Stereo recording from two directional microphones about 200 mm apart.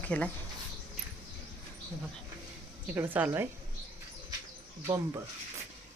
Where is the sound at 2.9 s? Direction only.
10° right (ahead or behind).